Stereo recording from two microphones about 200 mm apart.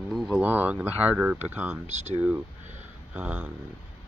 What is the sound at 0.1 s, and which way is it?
Speech, 5° right (ahead or behind).